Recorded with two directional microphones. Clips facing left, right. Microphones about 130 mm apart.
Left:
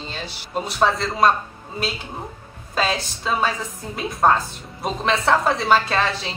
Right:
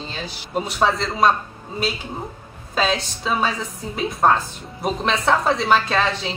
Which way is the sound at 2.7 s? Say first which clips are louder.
Right 1 dB; centre (ahead or behind).